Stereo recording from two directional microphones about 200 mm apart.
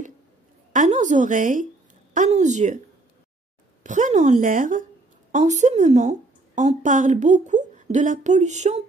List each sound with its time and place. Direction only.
0.7 s a woman's voice: 35° right (ahead or behind)
3.8 s a woman's voice: 40° right (ahead or behind)